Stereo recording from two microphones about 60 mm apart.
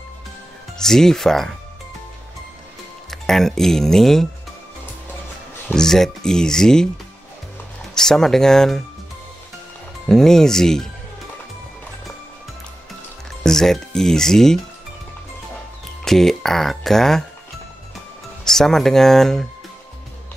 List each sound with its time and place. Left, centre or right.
0.7 s speech: centre
3.1 s speech: centre
5.7 s speech: centre
7.9 s speech: centre
10.0 s speech: centre
13.4 s speech: centre
16.0 s speech: centre
18.4 s speech: centre